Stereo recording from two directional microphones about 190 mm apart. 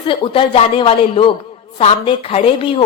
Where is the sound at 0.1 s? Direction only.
25° left (ahead or behind).